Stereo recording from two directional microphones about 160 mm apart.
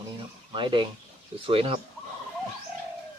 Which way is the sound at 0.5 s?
30° right (ahead or behind).